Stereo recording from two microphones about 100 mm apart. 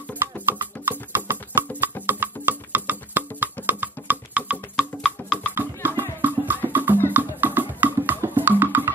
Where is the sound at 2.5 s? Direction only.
20° right (ahead or behind).